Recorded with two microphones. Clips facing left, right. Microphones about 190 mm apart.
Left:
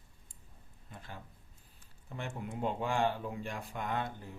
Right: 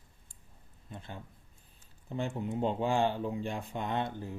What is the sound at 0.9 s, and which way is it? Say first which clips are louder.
A man's voice: right 4 dB; 25° right (ahead or behind).